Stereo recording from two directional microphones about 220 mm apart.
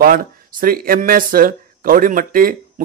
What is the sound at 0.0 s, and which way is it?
Speech, 40° right (ahead or behind).